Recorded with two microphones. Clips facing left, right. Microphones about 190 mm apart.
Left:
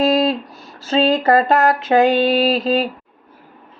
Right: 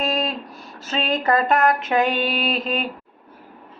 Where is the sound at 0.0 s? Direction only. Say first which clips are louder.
Left 9 dB; 30° left (ahead or behind).